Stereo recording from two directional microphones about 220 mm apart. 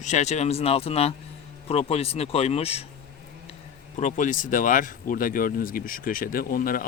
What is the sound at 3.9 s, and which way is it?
Speech, 35° left (ahead or behind).